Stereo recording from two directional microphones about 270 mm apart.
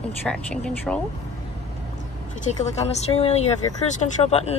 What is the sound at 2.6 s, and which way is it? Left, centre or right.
A woman's voice, left.